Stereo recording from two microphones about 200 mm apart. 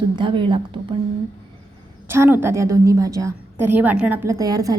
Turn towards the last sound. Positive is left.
turn(degrees=-20)  # may be behind; listen again after turning